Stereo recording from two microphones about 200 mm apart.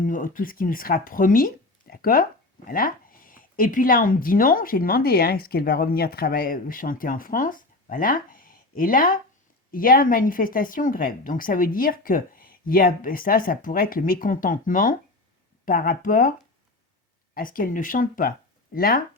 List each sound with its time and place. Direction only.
0.0 s speech: 40° left (ahead or behind)
17.3 s speech: 45° left (ahead or behind)